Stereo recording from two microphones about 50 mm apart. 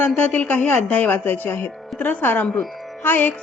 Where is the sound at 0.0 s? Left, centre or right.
Left.